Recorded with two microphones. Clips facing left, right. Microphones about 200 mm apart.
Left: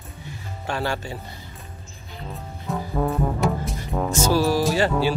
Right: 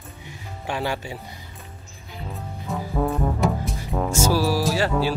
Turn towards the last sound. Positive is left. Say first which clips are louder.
# left 1 dB
turn(degrees=0)  # may be behind; listen again after turning